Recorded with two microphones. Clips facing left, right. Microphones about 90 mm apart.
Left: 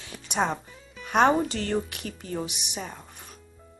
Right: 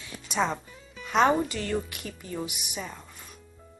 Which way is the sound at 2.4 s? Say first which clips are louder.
Left 1 dB; 25° left (ahead or behind).